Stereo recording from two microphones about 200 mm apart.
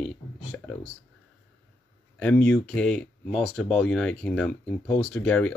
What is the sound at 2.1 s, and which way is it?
Speech, 5° left (ahead or behind).